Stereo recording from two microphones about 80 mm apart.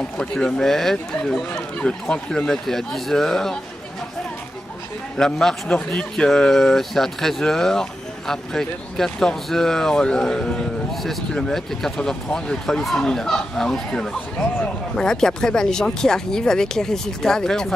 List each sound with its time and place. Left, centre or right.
0.2 s a man's voice: centre
5.1 s a man's voice: centre